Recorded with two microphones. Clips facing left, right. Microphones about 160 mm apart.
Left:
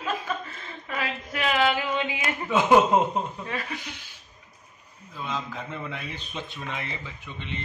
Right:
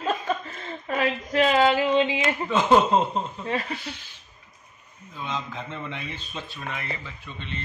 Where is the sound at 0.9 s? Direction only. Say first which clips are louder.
Right 6 dB; 35° right (ahead or behind).